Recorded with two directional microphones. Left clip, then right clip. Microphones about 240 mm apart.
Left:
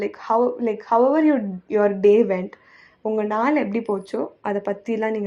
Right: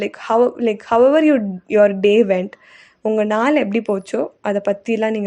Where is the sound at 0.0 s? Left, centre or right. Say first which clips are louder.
Right 4 dB; right.